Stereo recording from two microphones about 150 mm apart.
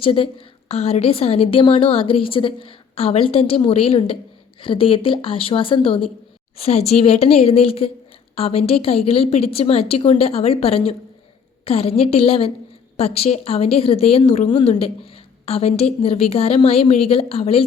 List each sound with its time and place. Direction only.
0.0 s a woman's voice: 35° left (ahead or behind)